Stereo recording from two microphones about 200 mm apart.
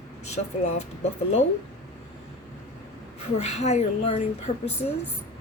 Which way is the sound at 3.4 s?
35° left (ahead or behind).